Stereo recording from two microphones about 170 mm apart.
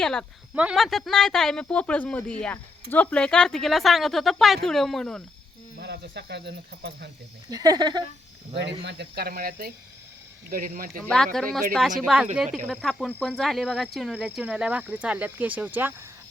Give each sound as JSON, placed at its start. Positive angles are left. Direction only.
{"t": 0.0, "sound": "speech", "side_deg": 5}
{"t": 5.8, "sound": "speech", "side_deg": -80}
{"t": 7.5, "sound": "speech", "side_deg": -20}
{"t": 8.8, "sound": "speech", "side_deg": -80}
{"t": 11.0, "sound": "speech", "side_deg": 5}